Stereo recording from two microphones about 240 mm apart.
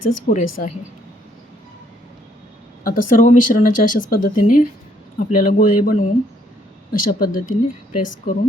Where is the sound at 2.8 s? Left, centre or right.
Left.